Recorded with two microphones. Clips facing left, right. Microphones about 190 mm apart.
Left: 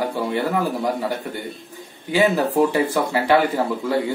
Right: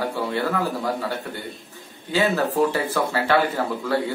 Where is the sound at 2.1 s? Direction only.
15° left (ahead or behind).